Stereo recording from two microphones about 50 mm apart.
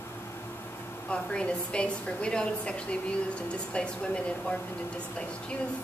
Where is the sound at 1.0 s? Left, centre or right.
Left.